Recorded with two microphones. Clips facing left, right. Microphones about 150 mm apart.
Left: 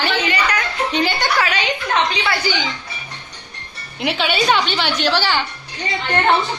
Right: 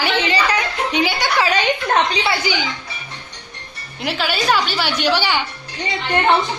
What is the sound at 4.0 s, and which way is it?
A woman's voice, centre (ahead or behind).